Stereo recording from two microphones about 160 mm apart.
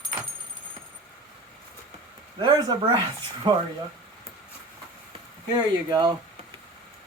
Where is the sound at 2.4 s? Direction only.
25° right (ahead or behind).